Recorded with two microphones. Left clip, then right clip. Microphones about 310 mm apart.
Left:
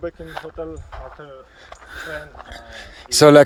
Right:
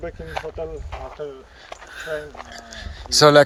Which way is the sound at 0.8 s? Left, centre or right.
Right.